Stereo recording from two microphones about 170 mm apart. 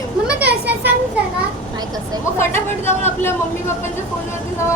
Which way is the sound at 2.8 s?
15° left (ahead or behind).